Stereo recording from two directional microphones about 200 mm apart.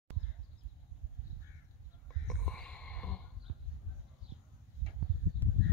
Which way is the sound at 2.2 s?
5° left (ahead or behind).